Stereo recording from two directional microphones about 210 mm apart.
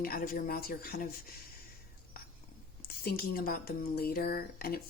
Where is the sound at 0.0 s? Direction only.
45° left (ahead or behind).